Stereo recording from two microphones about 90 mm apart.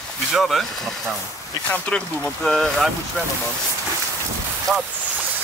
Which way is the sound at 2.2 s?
5° left (ahead or behind).